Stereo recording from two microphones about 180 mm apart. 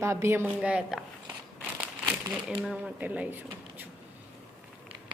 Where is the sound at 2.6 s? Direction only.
5° right (ahead or behind).